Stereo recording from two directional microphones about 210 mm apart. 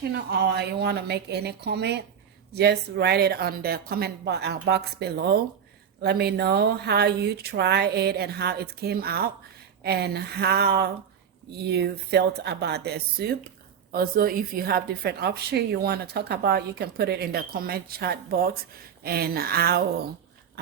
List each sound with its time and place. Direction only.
0.1 s a woman's voice: 50° right (ahead or behind)